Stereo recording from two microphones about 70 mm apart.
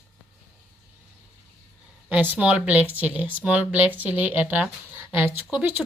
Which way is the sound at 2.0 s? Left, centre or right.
Right.